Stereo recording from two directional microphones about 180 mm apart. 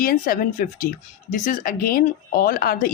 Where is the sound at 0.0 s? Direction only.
50° left (ahead or behind).